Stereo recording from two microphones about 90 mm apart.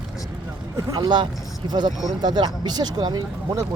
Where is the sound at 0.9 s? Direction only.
55° right (ahead or behind).